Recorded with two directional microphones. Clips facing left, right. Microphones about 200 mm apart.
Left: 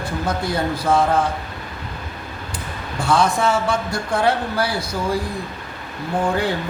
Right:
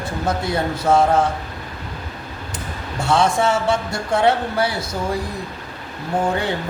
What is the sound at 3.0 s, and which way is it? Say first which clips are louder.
Speech: right 1 dB; 25° right (ahead or behind).